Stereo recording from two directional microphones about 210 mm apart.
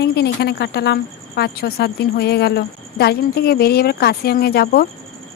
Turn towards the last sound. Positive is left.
turn(degrees=50)  # may be behind; listen again after turning